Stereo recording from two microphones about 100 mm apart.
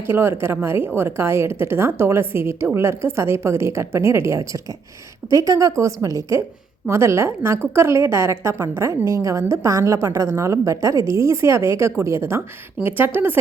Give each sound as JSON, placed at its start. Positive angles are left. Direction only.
{"t": 0.1, "sound": "a woman's voice", "side_deg": -25}